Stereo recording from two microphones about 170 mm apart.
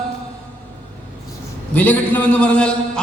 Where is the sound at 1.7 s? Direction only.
10° left (ahead or behind).